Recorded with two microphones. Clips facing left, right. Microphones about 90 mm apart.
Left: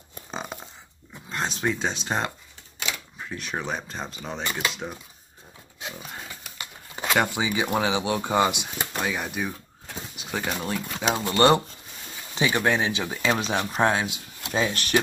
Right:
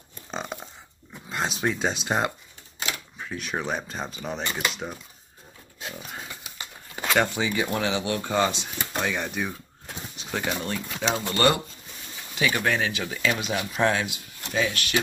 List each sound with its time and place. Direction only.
0.3 s a sound: centre (ahead or behind)
1.3 s speech: 5° right (ahead or behind)
5.9 s a sound: 5° right (ahead or behind)
7.0 s speech: 10° left (ahead or behind)
9.0 s speech: 5° left (ahead or behind)
11.2 s speech: 25° left (ahead or behind); by 13.8 s 40° left (ahead or behind)
13.8 s speech: 20° left (ahead or behind)
14.5 s speech: 35° left (ahead or behind)